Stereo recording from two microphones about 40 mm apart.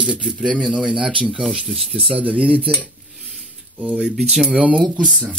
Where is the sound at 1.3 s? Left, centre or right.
Centre.